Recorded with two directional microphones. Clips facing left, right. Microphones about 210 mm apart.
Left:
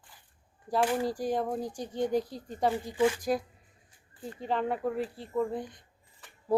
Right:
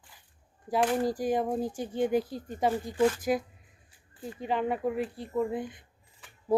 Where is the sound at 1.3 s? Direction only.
5° right (ahead or behind).